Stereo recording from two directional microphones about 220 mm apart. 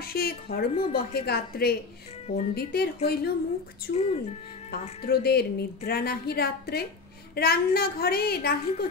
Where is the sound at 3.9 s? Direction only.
50° left (ahead or behind).